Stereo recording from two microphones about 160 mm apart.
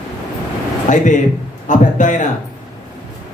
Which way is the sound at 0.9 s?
50° left (ahead or behind).